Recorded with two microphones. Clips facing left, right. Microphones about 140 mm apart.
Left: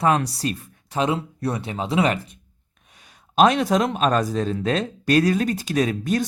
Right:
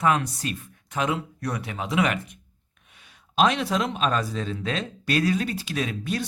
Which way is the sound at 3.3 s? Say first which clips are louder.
Left 5 dB; 45° left (ahead or behind).